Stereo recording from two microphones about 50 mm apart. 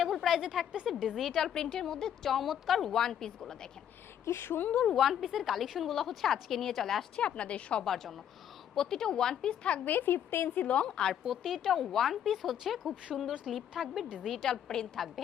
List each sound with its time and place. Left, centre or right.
0.0 s a woman's voice: centre
1.4 s a woman's voice: centre
4.3 s a woman's voice: left
4.9 s a woman's voice: centre
7.2 s a woman's voice: left
7.9 s a woman's voice: centre
9.6 s a woman's voice: left
9.9 s a woman's voice: left
10.6 s a woman's voice: left
11.3 s a woman's voice: centre
14.5 s a woman's voice: centre